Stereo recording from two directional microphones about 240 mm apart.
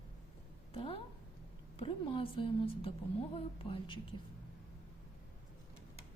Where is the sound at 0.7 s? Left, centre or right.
Left.